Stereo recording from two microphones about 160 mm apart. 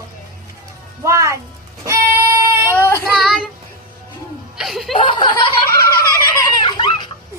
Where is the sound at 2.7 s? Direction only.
15° left (ahead or behind).